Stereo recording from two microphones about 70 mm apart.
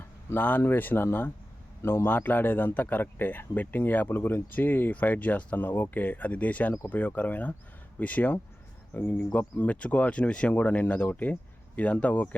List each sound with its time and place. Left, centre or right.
0.3 s a man's voice: left